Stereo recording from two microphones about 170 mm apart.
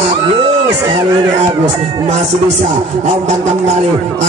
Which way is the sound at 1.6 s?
40° right (ahead or behind).